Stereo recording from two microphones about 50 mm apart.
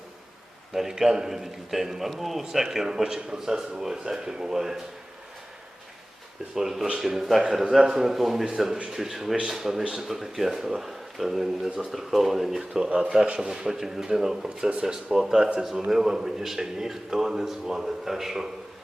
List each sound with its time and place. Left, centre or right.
0.7 s a man's voice: centre
6.6 s a man's voice: centre
15.1 s a man's voice: centre